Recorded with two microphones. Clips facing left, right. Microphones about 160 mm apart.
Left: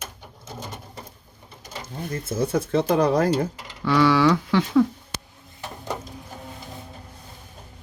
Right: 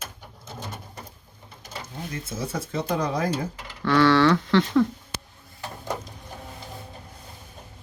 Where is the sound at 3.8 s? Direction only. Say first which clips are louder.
Even; 10° left (ahead or behind).